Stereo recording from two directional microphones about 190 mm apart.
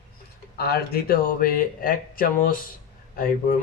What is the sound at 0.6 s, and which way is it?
Speech, 55° left (ahead or behind).